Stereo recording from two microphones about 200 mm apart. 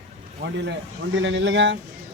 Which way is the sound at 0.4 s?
60° right (ahead or behind).